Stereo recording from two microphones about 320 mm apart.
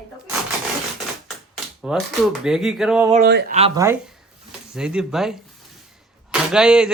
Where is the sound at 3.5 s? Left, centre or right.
Centre.